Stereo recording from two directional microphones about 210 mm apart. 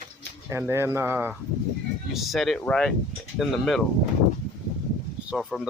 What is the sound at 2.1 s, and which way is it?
Speech, centre (ahead or behind).